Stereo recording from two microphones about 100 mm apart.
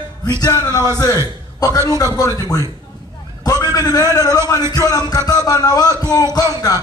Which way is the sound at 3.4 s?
40° left (ahead or behind).